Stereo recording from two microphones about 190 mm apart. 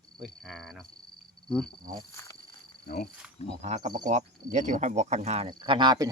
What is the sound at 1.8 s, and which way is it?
Speech, 45° right (ahead or behind).